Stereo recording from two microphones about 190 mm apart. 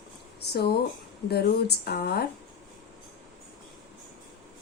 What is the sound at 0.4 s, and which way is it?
A woman's voice, 60° left (ahead or behind).